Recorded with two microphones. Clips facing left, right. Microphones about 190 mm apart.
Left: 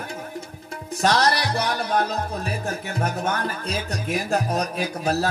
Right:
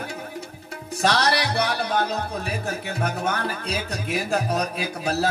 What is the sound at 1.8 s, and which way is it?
Speech, 35° left (ahead or behind).